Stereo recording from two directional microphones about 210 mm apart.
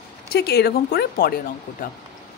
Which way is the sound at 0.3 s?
50° left (ahead or behind).